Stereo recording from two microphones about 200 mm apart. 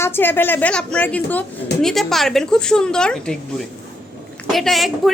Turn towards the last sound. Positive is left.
turn(degrees=0)  # may be behind; listen again after turning